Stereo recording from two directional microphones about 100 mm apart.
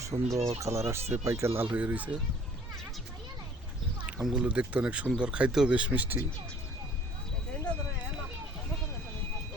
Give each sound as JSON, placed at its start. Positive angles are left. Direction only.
{"t": 0.1, "sound": "speech", "side_deg": -60}
{"t": 0.6, "sound": "speech", "side_deg": -30}
{"t": 4.2, "sound": "speech", "side_deg": -10}